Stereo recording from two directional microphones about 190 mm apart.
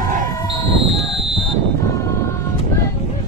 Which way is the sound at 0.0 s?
45° right (ahead or behind).